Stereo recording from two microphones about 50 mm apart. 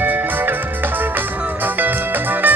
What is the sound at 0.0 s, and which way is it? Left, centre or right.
Music, right.